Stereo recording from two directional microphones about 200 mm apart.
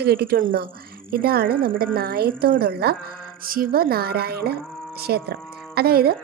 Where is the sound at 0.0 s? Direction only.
55° right (ahead or behind).